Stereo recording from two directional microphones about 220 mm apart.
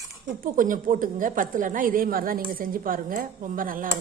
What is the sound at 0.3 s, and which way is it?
A woman's voice, 35° right (ahead or behind).